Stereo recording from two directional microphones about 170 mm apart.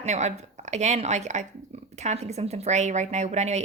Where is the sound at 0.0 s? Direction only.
45° right (ahead or behind).